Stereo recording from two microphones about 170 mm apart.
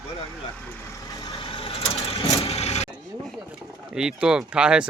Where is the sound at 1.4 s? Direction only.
35° left (ahead or behind).